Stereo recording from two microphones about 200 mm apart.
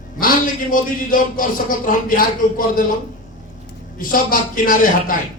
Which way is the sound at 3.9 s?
45° left (ahead or behind).